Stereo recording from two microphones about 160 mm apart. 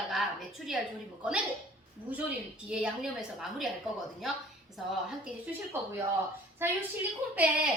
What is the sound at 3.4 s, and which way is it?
Speech, centre (ahead or behind).